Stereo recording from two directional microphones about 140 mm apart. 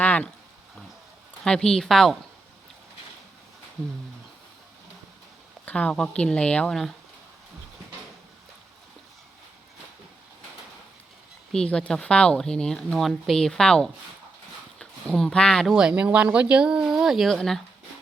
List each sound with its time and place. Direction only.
0.0 s a sound: 10° left (ahead or behind)
1.5 s speech: 5° left (ahead or behind)
5.6 s speech: 10° left (ahead or behind)
11.5 s speech: 5° left (ahead or behind)
15.7 s speech: 5° right (ahead or behind)